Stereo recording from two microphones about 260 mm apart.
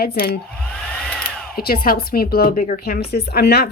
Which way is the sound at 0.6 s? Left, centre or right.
Centre.